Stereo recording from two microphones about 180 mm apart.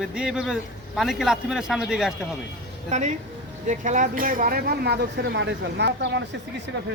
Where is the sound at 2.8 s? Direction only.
40° right (ahead or behind).